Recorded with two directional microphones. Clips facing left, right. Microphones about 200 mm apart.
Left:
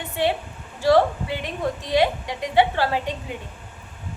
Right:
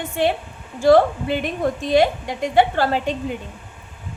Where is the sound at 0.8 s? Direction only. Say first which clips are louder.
Right 4 dB; 50° right (ahead or behind).